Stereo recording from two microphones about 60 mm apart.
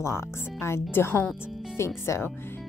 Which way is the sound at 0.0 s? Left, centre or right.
Left.